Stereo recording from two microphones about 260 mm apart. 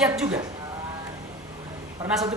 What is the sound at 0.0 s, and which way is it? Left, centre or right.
Speech, centre.